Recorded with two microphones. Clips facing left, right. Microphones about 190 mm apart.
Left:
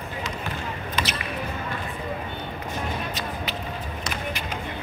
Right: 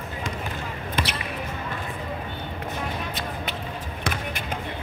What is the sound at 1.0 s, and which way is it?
Basketball bounce, 55° right (ahead or behind).